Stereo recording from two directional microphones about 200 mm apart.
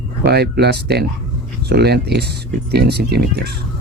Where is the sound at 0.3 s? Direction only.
55° right (ahead or behind).